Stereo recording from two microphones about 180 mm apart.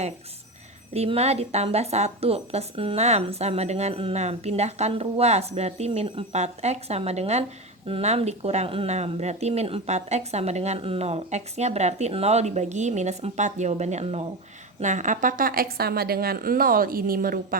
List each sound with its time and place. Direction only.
0.9 s a woman's voice: 35° right (ahead or behind); by 17.6 s 50° right (ahead or behind)